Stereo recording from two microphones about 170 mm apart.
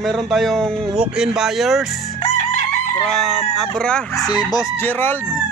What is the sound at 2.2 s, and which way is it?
Chicken, 45° left (ahead or behind).